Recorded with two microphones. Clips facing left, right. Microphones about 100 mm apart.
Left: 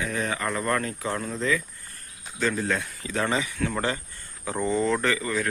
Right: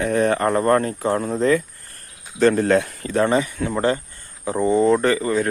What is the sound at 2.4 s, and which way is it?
Speech, 55° right (ahead or behind).